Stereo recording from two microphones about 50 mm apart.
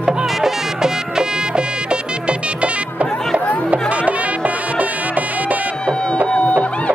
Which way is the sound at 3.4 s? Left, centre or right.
Left.